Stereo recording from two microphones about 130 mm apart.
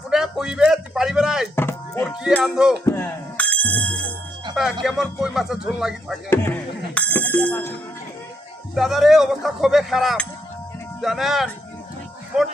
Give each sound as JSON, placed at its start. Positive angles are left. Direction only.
{"t": 0.1, "sound": "a sound", "side_deg": -5}
{"t": 1.5, "sound": "music", "side_deg": 20}
{"t": 2.4, "sound": "speech", "side_deg": -5}
{"t": 2.8, "sound": "bicycle bell", "side_deg": 15}
{"t": 4.5, "sound": "speech", "side_deg": -5}
{"t": 6.3, "sound": "speech", "side_deg": 15}
{"t": 8.7, "sound": "speech", "side_deg": 0}